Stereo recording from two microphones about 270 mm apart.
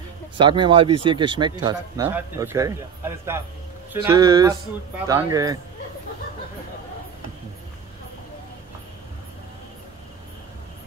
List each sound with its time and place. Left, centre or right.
0.4 s speech: centre